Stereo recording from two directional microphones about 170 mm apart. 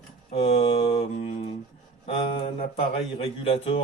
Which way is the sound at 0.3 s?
35° left (ahead or behind).